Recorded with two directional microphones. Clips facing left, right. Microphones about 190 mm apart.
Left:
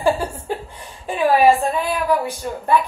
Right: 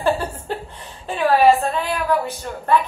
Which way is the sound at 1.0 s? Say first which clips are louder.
Even; 10° left (ahead or behind).